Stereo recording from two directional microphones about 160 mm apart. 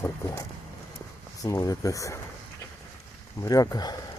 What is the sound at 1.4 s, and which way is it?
Speech, 20° left (ahead or behind).